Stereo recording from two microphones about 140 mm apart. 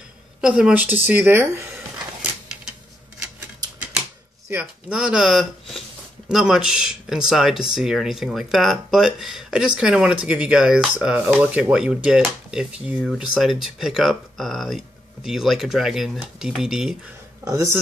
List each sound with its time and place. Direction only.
0.4 s a woman's voice: 5° right (ahead or behind)
4.5 s speech: 10° right (ahead or behind)
17.5 s speech: 20° right (ahead or behind)